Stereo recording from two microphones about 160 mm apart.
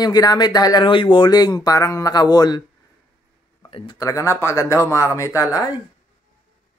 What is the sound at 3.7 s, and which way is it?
A man's voice, 25° left (ahead or behind).